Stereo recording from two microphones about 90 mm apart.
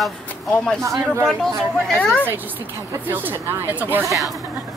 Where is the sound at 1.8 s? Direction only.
10° left (ahead or behind).